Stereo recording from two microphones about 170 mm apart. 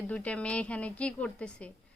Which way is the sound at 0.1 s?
5° left (ahead or behind).